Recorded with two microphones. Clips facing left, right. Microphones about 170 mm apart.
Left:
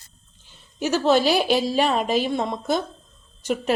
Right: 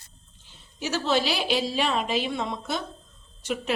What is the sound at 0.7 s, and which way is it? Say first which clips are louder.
A woman's voice: left 6 dB; 50° left (ahead or behind).